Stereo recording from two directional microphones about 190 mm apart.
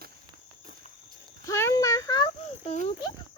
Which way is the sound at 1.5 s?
15° left (ahead or behind).